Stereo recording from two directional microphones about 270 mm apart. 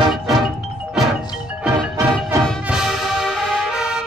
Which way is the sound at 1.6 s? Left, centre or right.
Centre.